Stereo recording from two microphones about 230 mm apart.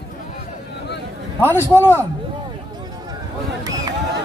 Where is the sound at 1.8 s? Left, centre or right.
Centre.